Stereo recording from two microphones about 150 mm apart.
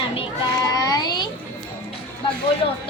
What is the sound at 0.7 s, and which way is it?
Speech, 25° left (ahead or behind).